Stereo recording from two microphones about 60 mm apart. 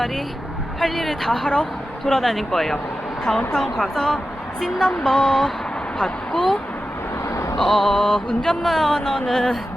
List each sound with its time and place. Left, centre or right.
0.8 s speech: centre
7.3 s a sound: left
7.5 s music: centre
8.6 s speech: centre